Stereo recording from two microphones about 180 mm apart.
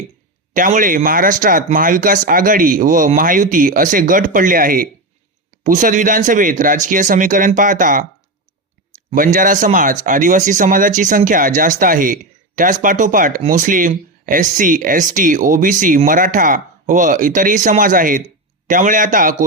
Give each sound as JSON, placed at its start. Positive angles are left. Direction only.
{"t": 0.5, "sound": "speech", "side_deg": -45}
{"t": 9.1, "sound": "speech", "side_deg": -50}